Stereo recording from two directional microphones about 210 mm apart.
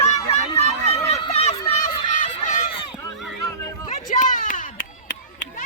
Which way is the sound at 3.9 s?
35° left (ahead or behind).